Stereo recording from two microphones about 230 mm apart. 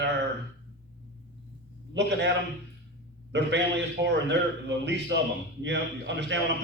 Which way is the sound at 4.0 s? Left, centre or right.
Right.